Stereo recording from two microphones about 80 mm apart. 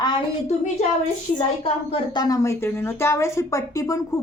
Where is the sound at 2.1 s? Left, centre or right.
Left.